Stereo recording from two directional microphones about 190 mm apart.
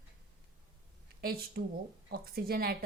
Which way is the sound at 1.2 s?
50° right (ahead or behind).